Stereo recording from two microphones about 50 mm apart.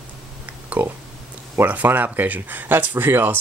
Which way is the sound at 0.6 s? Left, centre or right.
Right.